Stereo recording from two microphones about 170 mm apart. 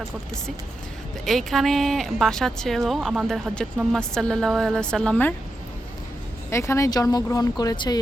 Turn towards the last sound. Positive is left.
turn(degrees=25)  # may be behind; listen again after turning